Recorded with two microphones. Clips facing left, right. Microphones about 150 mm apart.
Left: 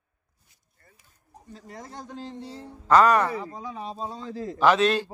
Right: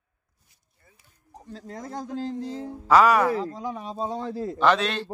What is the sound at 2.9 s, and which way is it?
Speech, 5° right (ahead or behind).